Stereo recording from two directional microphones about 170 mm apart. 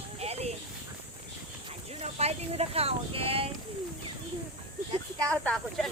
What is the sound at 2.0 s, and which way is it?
Speech, 40° right (ahead or behind).